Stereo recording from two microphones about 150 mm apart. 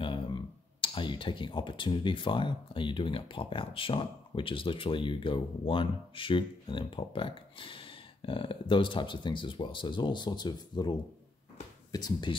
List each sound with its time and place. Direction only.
0.0 s speech: 35° left (ahead or behind)